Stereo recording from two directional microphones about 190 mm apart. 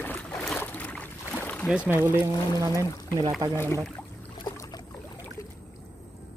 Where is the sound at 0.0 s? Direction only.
5° left (ahead or behind).